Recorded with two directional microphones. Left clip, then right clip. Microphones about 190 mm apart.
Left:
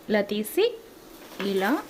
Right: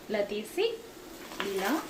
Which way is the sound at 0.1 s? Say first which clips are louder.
Left 6 dB; 65° left (ahead or behind).